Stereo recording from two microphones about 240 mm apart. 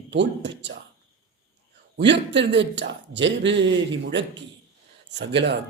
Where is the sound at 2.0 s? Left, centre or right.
Right.